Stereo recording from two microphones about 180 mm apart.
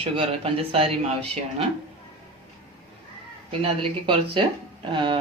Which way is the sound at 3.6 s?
30° right (ahead or behind).